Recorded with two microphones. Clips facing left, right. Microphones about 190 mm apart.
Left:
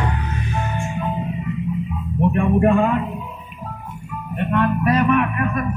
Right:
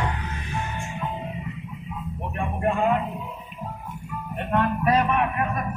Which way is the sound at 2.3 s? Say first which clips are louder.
Left 9 dB; 80° left.